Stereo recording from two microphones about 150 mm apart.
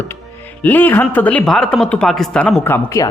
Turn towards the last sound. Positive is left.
turn(degrees=25)  # may be behind; listen again after turning